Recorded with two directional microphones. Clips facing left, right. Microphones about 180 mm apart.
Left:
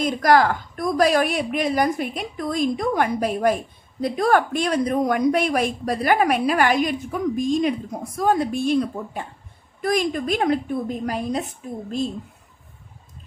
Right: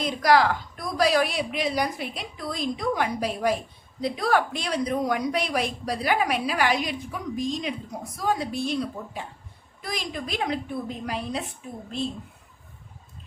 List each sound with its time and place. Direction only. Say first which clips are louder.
0.0 s speech: left 3 dB; 50° left (ahead or behind)